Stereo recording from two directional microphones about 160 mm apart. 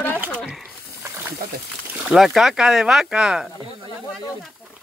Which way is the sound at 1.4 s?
65° right (ahead or behind).